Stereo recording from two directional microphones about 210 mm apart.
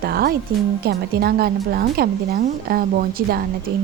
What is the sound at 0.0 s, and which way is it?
A woman's voice, 45° right (ahead or behind).